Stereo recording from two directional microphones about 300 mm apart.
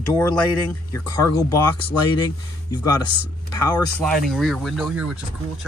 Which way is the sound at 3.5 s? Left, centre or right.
Centre.